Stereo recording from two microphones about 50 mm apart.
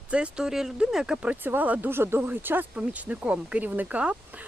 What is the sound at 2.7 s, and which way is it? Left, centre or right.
Speech, right.